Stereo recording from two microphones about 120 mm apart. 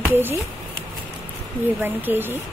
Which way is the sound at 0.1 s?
15° right (ahead or behind).